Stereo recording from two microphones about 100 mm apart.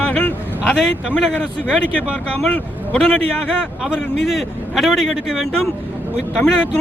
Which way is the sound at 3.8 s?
Centre (ahead or behind).